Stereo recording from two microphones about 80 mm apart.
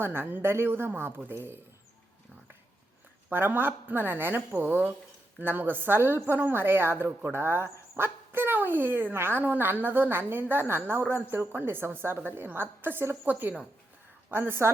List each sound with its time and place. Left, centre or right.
0.0 s a woman's voice: right
3.2 s a woman's voice: right